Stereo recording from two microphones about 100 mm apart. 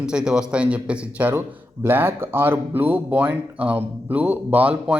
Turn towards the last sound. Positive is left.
turn(degrees=-15)  # may be behind; listen again after turning